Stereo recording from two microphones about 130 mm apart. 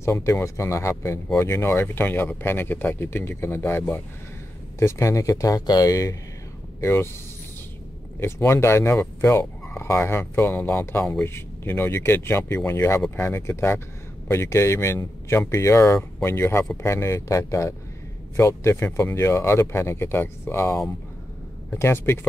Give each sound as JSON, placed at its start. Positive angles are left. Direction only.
{"t": 0.0, "sound": "speech", "side_deg": 20}
{"t": 8.2, "sound": "speech", "side_deg": 20}